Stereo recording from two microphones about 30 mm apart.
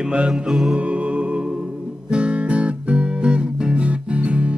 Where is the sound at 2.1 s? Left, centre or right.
Right.